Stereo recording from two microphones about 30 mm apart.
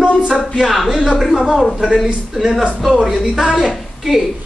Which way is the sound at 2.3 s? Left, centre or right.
Right.